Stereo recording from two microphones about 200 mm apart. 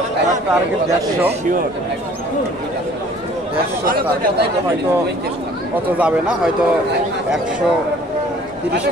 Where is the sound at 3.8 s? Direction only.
45° right (ahead or behind).